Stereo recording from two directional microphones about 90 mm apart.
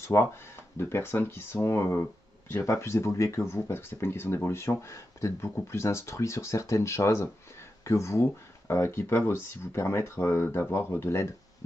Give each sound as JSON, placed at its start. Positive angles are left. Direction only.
{"t": 0.0, "sound": "speech", "side_deg": 35}